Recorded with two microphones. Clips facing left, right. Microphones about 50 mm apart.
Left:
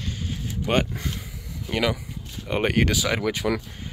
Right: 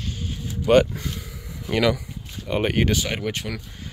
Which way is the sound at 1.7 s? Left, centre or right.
Centre.